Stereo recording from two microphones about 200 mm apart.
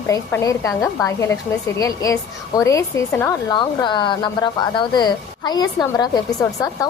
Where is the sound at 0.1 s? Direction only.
15° left (ahead or behind).